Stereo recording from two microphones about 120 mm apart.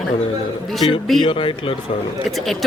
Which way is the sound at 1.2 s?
45° left (ahead or behind).